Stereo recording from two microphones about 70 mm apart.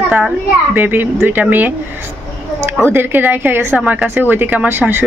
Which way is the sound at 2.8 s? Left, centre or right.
Right.